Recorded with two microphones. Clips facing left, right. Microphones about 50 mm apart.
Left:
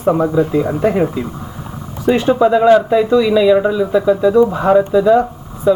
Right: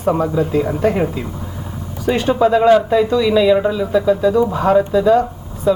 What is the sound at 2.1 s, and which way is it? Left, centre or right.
A man's voice, centre.